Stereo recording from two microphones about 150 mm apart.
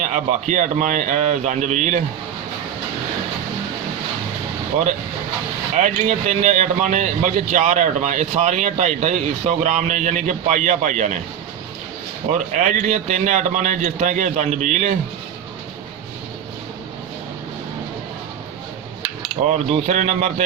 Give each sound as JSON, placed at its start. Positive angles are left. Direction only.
{"t": 0.0, "sound": "a man's voice", "side_deg": -55}
{"t": 5.7, "sound": "speech", "side_deg": -55}
{"t": 12.5, "sound": "a man's voice", "side_deg": -55}
{"t": 19.5, "sound": "speech", "side_deg": -50}